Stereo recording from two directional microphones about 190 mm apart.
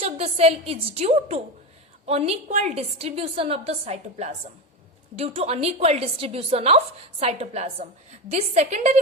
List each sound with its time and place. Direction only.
0.0 s a woman's voice: 30° right (ahead or behind)